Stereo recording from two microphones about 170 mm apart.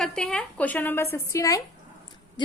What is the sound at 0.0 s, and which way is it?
A woman's voice, 5° left (ahead or behind).